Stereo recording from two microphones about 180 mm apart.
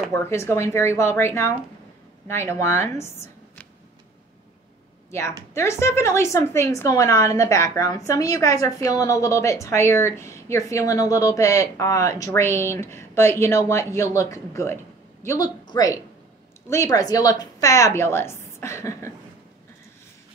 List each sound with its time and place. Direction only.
0.1 s a woman's voice: 15° left (ahead or behind)
5.5 s a woman's voice: 15° left (ahead or behind)